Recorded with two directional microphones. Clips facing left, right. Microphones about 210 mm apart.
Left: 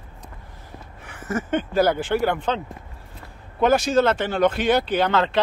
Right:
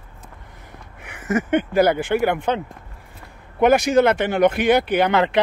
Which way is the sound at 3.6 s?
15° right (ahead or behind).